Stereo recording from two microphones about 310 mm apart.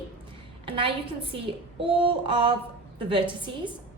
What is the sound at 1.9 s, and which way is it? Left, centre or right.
A woman's voice, centre.